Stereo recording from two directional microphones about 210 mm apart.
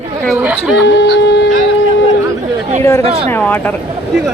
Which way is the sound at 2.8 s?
15° left (ahead or behind).